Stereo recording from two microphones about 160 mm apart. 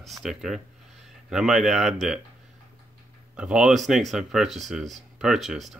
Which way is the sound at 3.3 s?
5° right (ahead or behind).